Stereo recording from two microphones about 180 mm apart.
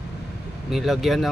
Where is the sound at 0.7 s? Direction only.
Centre (ahead or behind).